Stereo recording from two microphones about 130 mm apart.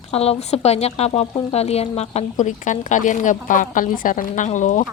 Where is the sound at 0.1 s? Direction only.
50° left (ahead or behind); by 4.9 s 75° left (ahead or behind).